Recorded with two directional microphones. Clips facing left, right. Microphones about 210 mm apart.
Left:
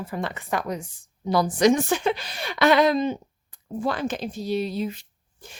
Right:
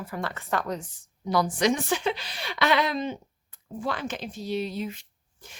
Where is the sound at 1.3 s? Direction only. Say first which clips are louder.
Left 5 dB; 35° left (ahead or behind).